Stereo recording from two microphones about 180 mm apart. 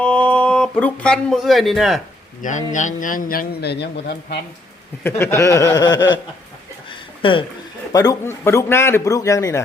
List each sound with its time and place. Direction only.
0.0 s speech: 5° left (ahead or behind)
2.4 s a man's voice: 45° left (ahead or behind)
5.0 s a man's voice: 15° left (ahead or behind)
6.9 s a sound: 30° left (ahead or behind)
7.9 s a man's voice: 15° left (ahead or behind)